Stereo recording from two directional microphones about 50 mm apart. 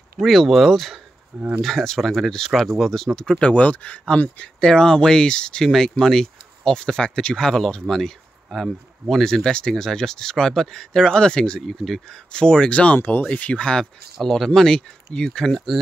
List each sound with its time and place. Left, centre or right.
0.2 s speech: centre; by 4.0 s left
4.6 s speech: centre
11.6 s speech: centre
12.3 s speech: centre
12.7 s speech: left
14.2 s speech: centre